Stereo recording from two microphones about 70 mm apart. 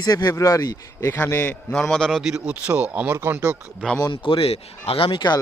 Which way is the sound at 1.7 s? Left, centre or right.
Centre.